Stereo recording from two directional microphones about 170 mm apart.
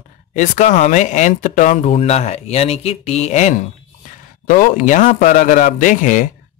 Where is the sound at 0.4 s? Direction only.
45° left (ahead or behind).